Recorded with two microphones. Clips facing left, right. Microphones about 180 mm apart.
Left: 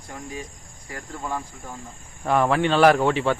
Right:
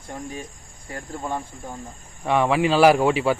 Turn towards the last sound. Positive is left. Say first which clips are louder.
# right 1 dB
turn(degrees=-10)  # may be behind; listen again after turning